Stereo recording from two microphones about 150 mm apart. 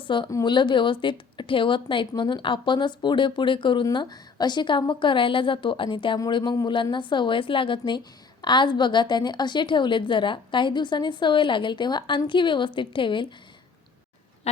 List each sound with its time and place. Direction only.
0.0 s a woman's voice: 35° left (ahead or behind)
14.5 s goose: 45° left (ahead or behind)